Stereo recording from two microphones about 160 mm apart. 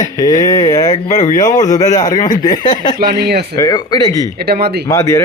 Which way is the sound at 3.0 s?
90° right.